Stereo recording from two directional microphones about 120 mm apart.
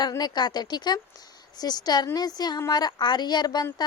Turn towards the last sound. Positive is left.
turn(degrees=35)  # may be behind; listen again after turning